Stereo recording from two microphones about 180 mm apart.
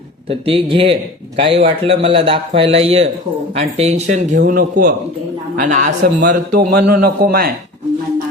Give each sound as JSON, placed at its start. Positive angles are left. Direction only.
{"t": 0.3, "sound": "a man's voice", "side_deg": -30}